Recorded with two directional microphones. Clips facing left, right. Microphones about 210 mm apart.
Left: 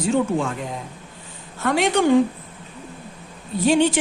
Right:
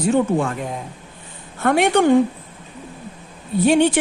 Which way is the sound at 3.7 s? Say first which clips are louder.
Right 2 dB; 60° right (ahead or behind).